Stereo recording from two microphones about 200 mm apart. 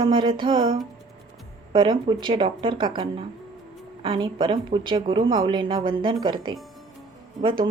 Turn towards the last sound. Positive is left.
turn(degrees=-25)  # may be behind; listen again after turning